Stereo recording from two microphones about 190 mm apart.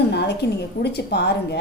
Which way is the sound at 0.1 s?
60° left (ahead or behind).